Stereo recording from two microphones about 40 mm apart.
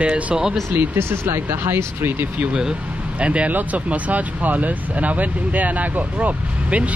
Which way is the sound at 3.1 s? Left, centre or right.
Right.